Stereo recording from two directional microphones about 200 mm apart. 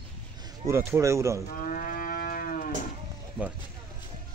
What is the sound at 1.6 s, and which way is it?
Cattle, 45° left (ahead or behind).